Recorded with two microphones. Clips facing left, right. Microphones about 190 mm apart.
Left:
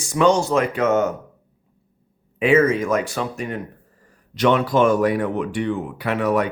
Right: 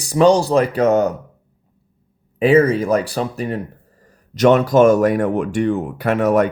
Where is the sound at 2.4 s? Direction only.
35° right (ahead or behind).